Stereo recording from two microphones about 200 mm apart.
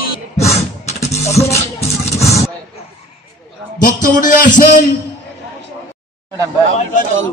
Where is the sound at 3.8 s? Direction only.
40° left (ahead or behind).